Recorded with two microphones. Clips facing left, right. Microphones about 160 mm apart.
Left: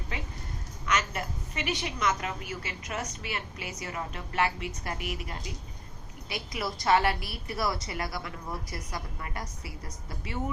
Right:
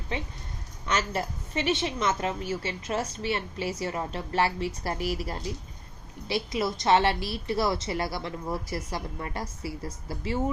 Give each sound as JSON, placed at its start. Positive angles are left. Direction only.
{"t": 0.9, "sound": "a woman's voice", "side_deg": -30}